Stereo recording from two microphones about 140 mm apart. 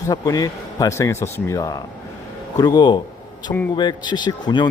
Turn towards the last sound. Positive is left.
turn(degrees=30)  # may be behind; listen again after turning